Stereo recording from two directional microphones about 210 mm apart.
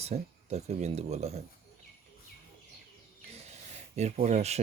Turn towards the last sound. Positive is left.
turn(degrees=-30)  # may be behind; listen again after turning